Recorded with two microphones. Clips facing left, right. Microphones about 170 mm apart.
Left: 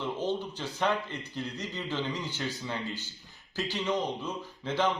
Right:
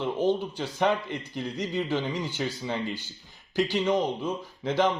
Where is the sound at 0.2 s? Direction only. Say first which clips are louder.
Right 6 dB; 10° right (ahead or behind).